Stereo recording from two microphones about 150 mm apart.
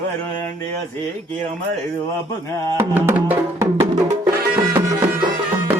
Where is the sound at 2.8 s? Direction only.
15° right (ahead or behind).